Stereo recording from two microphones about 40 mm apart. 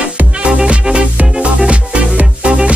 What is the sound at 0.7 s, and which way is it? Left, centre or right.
Music, right.